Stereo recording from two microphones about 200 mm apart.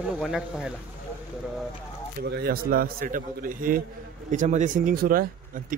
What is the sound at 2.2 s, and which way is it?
A man's voice, 50° right (ahead or behind).